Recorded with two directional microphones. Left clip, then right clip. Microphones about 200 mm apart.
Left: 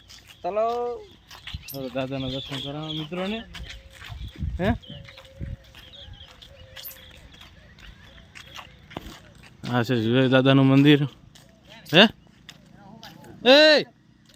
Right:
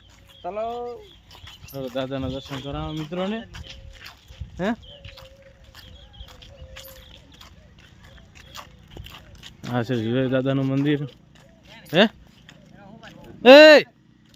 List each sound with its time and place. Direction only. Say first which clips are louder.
0.4 s speech: left 4 dB; 40° left (ahead or behind)
1.5 s a sound: right 1 dB; 25° right (ahead or behind)
2.0 s speech: right 1 dB; 15° right (ahead or behind)
2.2 s speech: even; 5° right (ahead or behind)
3.5 s dog: left 1 dB; 20° left (ahead or behind)
4.5 s speech: even; 5° right (ahead or behind)
6.8 s clip-clop: even; 15° left (ahead or behind)
9.6 s speech: left 2 dB; 10° left (ahead or behind); by 11.1 s 35° left (ahead or behind)
11.9 s speech: left 2 dB; 20° left (ahead or behind)
12.5 s a sound: even; 10° right (ahead or behind)
13.4 s speech: right 6 dB; 35° right (ahead or behind)